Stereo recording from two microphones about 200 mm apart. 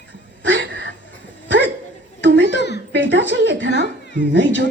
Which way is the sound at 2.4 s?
60° left (ahead or behind).